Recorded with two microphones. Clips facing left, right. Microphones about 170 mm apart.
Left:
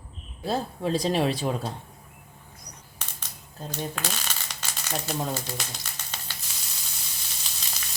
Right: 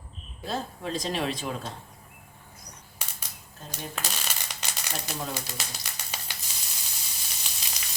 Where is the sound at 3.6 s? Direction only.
35° left (ahead or behind).